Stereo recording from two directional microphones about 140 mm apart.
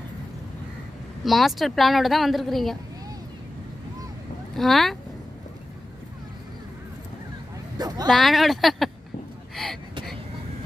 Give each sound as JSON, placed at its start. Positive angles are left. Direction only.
{"t": 1.2, "sound": "speech", "side_deg": 0}
{"t": 4.6, "sound": "speech", "side_deg": 0}
{"t": 7.7, "sound": "a sound", "side_deg": -30}
{"t": 8.1, "sound": "speech", "side_deg": 0}